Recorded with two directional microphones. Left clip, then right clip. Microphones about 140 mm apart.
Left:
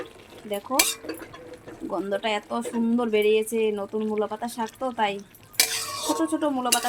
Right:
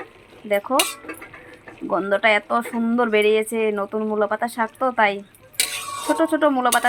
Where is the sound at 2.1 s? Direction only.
15° right (ahead or behind).